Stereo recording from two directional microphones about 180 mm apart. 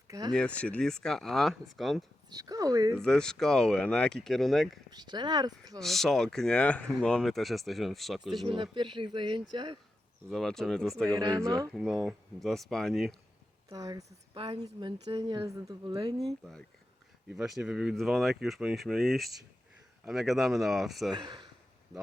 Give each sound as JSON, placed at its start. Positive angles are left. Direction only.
{"t": 0.1, "sound": "speech", "side_deg": -20}
{"t": 0.3, "sound": "speech", "side_deg": 5}
{"t": 2.3, "sound": "speech", "side_deg": -20}
{"t": 3.0, "sound": "speech", "side_deg": 5}
{"t": 4.9, "sound": "speech", "side_deg": -25}
{"t": 5.8, "sound": "speech", "side_deg": 0}
{"t": 8.4, "sound": "speech", "side_deg": -25}
{"t": 10.2, "sound": "speech", "side_deg": 0}
{"t": 11.1, "sound": "speech", "side_deg": -20}
{"t": 11.7, "sound": "speech", "side_deg": 0}
{"t": 13.7, "sound": "speech", "side_deg": -20}
{"t": 16.2, "sound": "speech", "side_deg": 0}
{"t": 21.1, "sound": "speech", "side_deg": -25}